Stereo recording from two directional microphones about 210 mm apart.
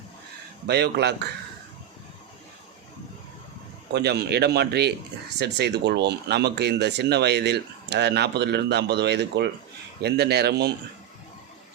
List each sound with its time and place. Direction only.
0.7 s speech: 50° right (ahead or behind)
3.9 s speech: 50° right (ahead or behind)